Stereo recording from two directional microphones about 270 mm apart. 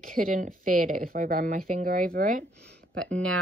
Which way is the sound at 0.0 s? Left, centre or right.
Right.